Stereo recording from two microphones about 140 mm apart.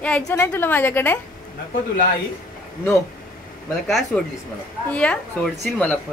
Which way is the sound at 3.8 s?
Centre (ahead or behind).